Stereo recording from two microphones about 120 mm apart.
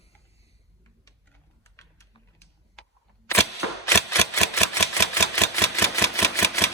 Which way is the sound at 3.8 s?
25° left (ahead or behind).